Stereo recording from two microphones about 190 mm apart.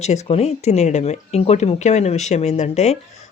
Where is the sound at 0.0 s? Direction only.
35° left (ahead or behind).